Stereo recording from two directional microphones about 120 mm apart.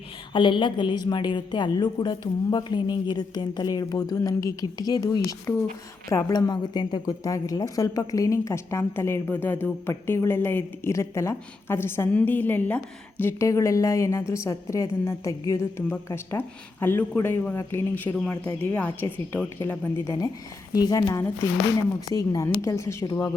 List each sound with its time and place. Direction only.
0.3 s a woman's voice: 45° left (ahead or behind); by 23.3 s 25° left (ahead or behind)